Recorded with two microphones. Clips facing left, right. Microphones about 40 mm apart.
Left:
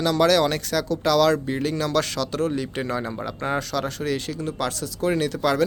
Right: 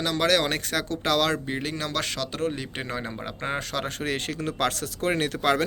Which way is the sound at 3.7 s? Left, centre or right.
Right.